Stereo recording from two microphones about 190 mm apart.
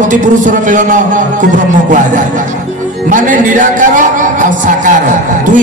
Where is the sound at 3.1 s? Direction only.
45° right (ahead or behind).